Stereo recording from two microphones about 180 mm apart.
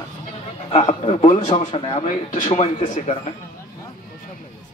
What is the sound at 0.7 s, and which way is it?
Speech, 30° left (ahead or behind).